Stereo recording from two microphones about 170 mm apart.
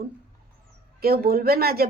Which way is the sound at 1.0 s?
65° right (ahead or behind).